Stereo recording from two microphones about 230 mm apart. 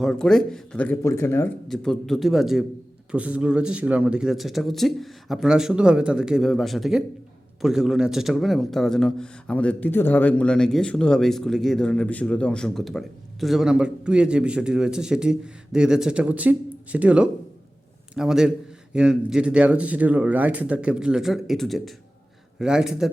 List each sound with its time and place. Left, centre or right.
0.0 s a man's voice: centre